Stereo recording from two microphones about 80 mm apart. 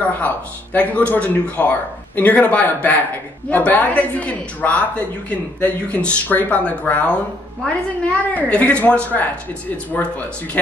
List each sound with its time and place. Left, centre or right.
0.7 s a woman's voice: centre